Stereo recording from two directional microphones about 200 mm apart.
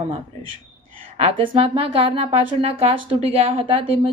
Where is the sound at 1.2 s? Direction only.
30° right (ahead or behind).